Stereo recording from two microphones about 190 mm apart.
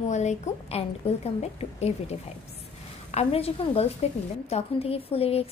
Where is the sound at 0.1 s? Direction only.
40° left (ahead or behind).